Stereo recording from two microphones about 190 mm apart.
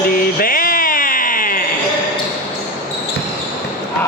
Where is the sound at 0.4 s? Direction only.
50° left (ahead or behind).